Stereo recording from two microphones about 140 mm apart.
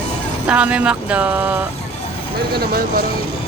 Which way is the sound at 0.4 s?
10° right (ahead or behind).